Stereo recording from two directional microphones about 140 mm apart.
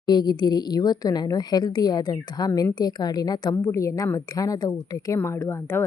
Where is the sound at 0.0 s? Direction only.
30° left (ahead or behind).